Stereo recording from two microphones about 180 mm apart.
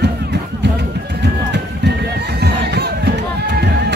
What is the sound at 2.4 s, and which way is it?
Neigh, 65° right (ahead or behind).